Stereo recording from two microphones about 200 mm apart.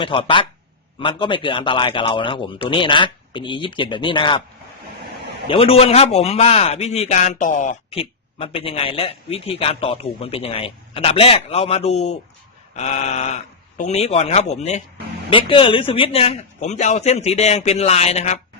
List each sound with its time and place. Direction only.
0.0 s a man's voice: 25° left (ahead or behind)
5.5 s a man's voice: 30° left (ahead or behind)